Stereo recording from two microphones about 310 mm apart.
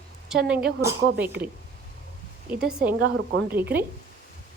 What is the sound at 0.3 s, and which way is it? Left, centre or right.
Speech, centre.